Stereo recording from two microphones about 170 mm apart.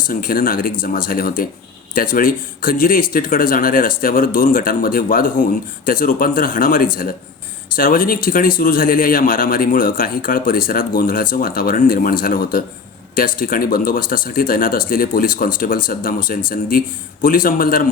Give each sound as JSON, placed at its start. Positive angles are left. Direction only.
{"t": 0.1, "sound": "speech", "side_deg": 55}